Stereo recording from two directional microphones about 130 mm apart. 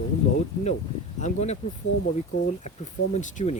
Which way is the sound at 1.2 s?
60° left (ahead or behind).